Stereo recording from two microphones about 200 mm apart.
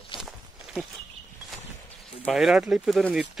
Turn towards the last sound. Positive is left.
turn(degrees=0)  # may be behind; listen again after turning